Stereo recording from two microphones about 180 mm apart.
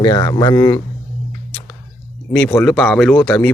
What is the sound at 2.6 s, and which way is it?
Speech, 5° left (ahead or behind).